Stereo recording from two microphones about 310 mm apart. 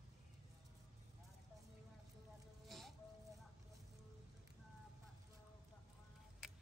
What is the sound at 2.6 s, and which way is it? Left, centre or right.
Music, centre.